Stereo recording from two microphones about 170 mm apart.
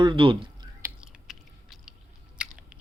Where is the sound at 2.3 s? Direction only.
5° right (ahead or behind).